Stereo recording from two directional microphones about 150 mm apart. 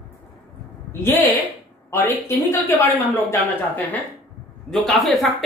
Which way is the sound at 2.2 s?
15° left (ahead or behind).